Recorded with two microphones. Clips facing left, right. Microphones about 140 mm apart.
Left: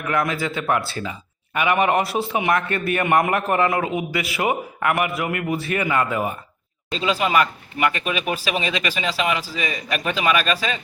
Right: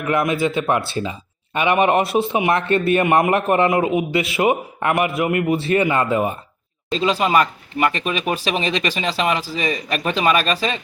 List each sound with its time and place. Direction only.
0.1 s a man's voice: 20° right (ahead or behind)
7.0 s speech: 35° right (ahead or behind)